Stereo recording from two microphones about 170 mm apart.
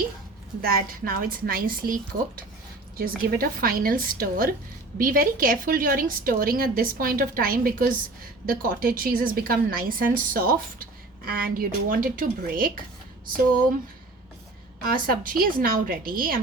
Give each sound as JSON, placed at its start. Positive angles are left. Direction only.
{"t": 0.6, "sound": "a woman's voice", "side_deg": -60}
{"t": 14.8, "sound": "a woman's voice", "side_deg": -60}